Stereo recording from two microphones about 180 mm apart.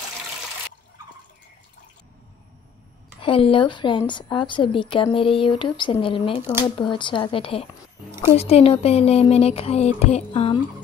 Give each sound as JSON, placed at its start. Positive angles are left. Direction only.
{"t": 3.2, "sound": "speech", "side_deg": 30}